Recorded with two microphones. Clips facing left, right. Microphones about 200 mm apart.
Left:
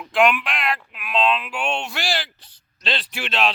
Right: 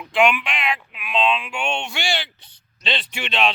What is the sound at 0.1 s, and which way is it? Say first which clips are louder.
Speech: even; centre (ahead or behind).